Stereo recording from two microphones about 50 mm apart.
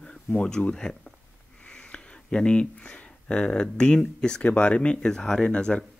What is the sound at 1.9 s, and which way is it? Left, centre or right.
Speech, centre.